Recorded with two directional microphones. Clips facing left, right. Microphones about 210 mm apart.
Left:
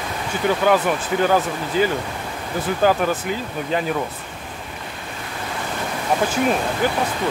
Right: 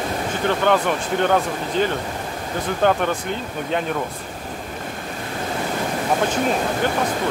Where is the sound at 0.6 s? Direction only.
5° left (ahead or behind).